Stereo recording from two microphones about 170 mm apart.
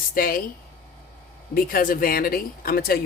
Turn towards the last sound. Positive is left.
turn(degrees=60)  # may be behind; listen again after turning